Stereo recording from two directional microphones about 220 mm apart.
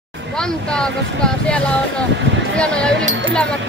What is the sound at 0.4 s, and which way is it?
Speech, 5° left (ahead or behind).